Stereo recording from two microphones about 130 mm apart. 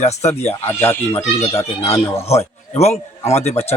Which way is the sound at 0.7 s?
15° left (ahead or behind).